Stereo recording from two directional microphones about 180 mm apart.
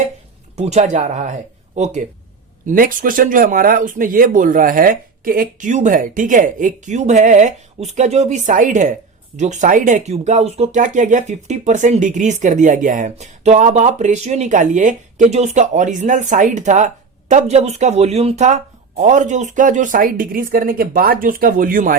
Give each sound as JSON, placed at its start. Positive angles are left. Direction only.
{"t": 0.5, "sound": "speech", "side_deg": -35}